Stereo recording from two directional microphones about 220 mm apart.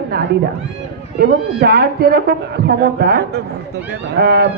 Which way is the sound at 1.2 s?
45° right (ahead or behind).